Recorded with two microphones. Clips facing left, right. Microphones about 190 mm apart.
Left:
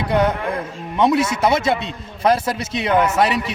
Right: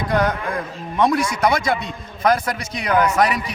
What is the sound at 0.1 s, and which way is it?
A man's voice, 25° left (ahead or behind).